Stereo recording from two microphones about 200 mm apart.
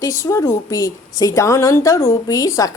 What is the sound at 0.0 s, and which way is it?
A woman's voice, 15° left (ahead or behind).